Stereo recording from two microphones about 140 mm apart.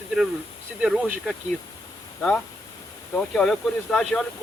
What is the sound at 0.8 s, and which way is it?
Speech, 5° right (ahead or behind).